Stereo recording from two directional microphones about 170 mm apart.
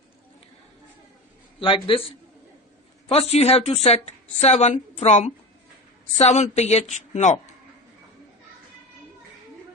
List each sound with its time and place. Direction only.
1.5 s a woman's voice: 30° left (ahead or behind)